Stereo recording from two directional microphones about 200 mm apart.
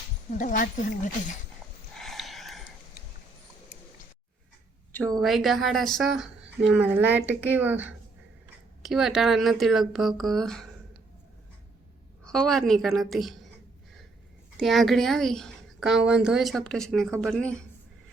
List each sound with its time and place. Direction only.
0.3 s speech: 40° left (ahead or behind)
2.0 s a sound: centre (ahead or behind)
5.2 s a woman's voice: centre (ahead or behind)
12.2 s a woman's voice: 5° left (ahead or behind)
14.6 s a woman's voice: centre (ahead or behind)